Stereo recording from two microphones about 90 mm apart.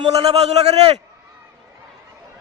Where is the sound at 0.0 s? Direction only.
90° right.